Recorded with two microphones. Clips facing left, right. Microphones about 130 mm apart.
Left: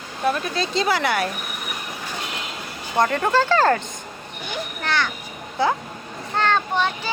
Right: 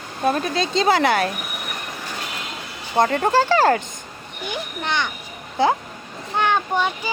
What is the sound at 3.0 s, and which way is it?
Speech, 20° right (ahead or behind).